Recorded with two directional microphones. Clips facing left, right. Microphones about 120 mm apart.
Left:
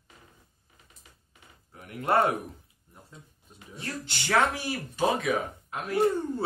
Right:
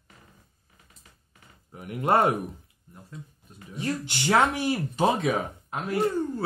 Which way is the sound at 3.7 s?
15° right (ahead or behind).